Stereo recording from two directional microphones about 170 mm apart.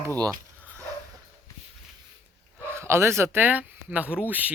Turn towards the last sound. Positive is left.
turn(degrees=-10)  # may be behind; listen again after turning